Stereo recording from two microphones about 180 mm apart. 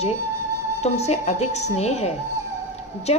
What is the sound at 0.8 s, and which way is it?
A woman's voice, 35° left (ahead or behind).